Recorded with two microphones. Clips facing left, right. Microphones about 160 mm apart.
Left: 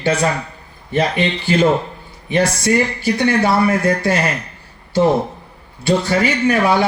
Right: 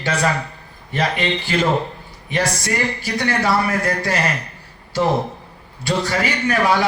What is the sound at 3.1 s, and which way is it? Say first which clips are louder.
Speech: left 3 dB; 25° left (ahead or behind).